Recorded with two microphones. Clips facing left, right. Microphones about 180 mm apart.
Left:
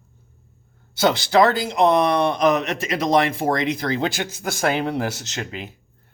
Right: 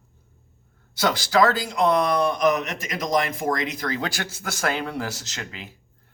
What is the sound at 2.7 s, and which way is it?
Speech, 30° left (ahead or behind).